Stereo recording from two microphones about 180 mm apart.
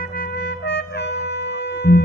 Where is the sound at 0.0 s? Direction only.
55° left (ahead or behind).